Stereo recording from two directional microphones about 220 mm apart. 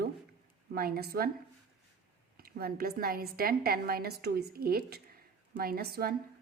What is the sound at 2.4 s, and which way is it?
A woman's voice, 45° right (ahead or behind).